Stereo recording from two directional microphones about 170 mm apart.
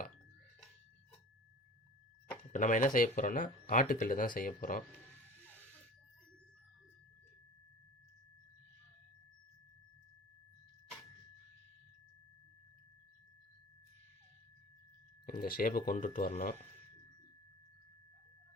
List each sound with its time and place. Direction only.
2.5 s speech: 50° left (ahead or behind)
5.4 s a sound: 10° right (ahead or behind)
15.3 s speech: 60° left (ahead or behind)